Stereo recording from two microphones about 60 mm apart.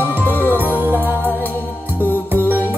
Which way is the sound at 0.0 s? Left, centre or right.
Left.